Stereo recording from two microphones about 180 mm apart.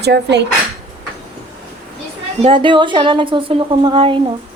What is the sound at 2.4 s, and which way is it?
A woman's voice, 30° right (ahead or behind).